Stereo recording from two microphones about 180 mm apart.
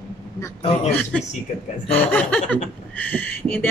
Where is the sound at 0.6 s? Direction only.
35° left (ahead or behind).